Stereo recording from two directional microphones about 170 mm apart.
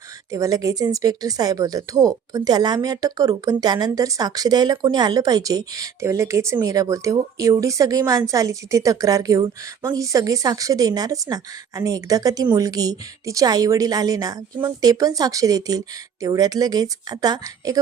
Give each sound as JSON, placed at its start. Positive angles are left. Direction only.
{"t": 0.3, "sound": "speech", "side_deg": -20}